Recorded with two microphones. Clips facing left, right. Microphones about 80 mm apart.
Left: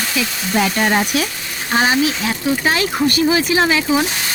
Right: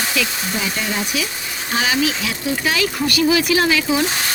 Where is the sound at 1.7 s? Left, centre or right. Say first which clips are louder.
Left 4 dB; left.